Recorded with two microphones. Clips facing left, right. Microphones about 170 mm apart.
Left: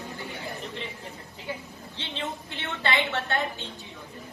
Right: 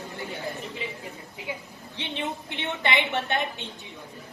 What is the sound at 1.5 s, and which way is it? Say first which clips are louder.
A woman's voice: left 1 dB; 10° right (ahead or behind).